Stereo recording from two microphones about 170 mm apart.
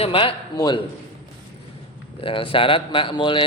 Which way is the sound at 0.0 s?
30° left (ahead or behind).